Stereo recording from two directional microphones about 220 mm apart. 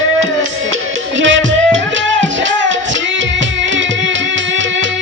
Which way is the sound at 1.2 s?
60° right (ahead or behind).